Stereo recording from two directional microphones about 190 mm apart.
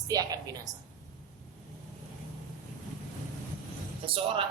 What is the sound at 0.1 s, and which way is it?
Speech, 20° right (ahead or behind).